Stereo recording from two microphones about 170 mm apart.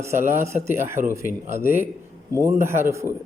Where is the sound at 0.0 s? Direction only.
15° right (ahead or behind).